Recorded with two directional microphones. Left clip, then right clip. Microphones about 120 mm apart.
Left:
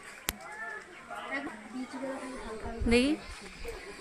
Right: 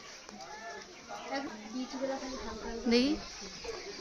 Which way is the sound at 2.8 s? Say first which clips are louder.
Left 2 dB; 15° left (ahead or behind).